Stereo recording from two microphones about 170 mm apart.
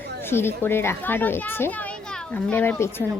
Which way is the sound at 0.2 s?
15° left (ahead or behind).